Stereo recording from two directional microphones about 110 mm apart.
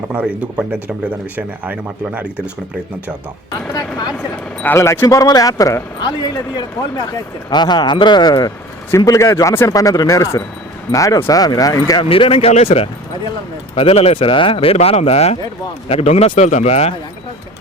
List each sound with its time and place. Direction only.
0.1 s speech: 15° right (ahead or behind)
3.7 s speech: 35° left (ahead or behind)
4.5 s speech: 20° left (ahead or behind)
6.0 s speech: 45° left (ahead or behind)
12.1 s speech: 55° left (ahead or behind)
12.5 s speech: 70° left (ahead or behind)